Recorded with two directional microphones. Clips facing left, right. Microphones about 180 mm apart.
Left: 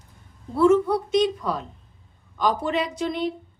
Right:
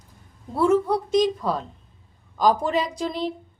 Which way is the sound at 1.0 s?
30° right (ahead or behind).